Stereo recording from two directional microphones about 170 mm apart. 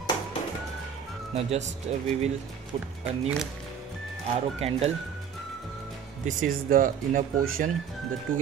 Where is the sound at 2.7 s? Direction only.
35° right (ahead or behind).